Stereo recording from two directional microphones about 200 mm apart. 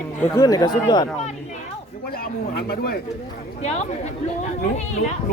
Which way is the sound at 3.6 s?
35° left (ahead or behind).